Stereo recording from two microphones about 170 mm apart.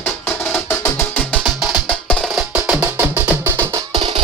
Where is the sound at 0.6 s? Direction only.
10° left (ahead or behind).